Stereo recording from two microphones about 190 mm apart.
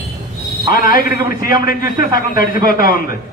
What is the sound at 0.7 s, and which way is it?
A man's voice, 50° left (ahead or behind).